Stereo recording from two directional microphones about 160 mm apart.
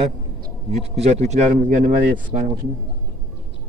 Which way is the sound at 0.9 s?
45° right (ahead or behind).